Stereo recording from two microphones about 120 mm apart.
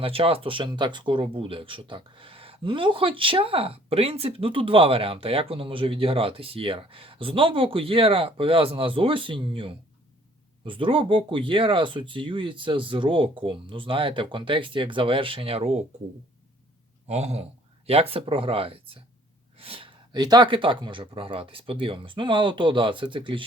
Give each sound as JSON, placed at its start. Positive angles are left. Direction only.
{"t": 0.0, "sound": "speech", "side_deg": -50}
{"t": 17.1, "sound": "speech", "side_deg": -65}